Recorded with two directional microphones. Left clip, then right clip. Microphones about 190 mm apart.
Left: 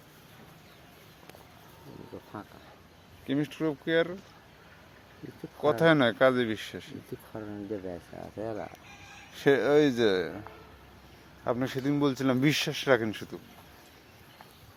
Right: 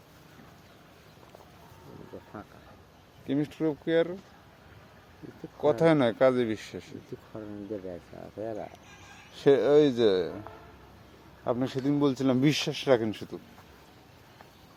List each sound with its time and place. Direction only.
3.2 s speech: 5° right (ahead or behind)
5.8 s speech: 5° right (ahead or behind)
8.4 s speech: 50° left (ahead or behind)
9.3 s speech: 10° right (ahead or behind)
11.4 s speech: 5° right (ahead or behind)